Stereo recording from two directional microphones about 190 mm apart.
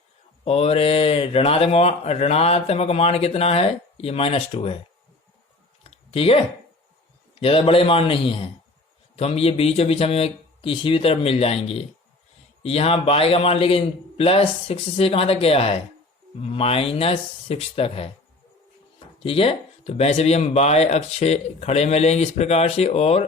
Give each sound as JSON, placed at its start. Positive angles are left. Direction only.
{"t": 0.4, "sound": "speech", "side_deg": 35}
{"t": 5.9, "sound": "a sound", "side_deg": 30}
{"t": 7.3, "sound": "a man's voice", "side_deg": 30}